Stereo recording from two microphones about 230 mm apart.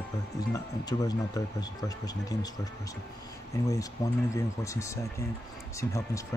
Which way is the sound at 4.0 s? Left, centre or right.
Centre.